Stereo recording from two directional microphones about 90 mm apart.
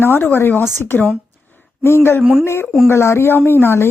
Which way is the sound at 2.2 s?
5° right (ahead or behind).